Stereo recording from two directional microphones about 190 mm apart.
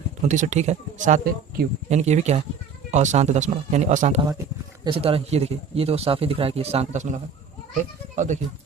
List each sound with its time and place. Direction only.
0.3 s speech: 40° right (ahead or behind)
4.2 s speech: 20° right (ahead or behind); by 8.4 s 40° right (ahead or behind)